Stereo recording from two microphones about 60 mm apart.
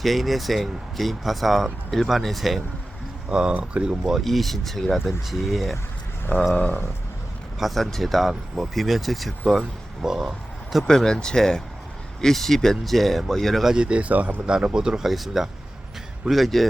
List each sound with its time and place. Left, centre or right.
0.0 s speech: centre
3.2 s speech: centre
4.0 s speech: centre
6.5 s speech: left
7.6 s a man's voice: centre
10.8 s speech: centre
13.7 s speech: centre